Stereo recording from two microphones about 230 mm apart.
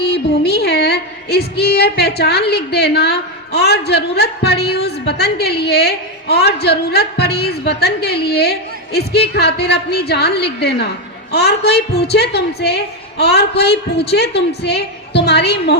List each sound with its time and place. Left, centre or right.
0.0 s female singing: left
2.5 s a woman's voice: left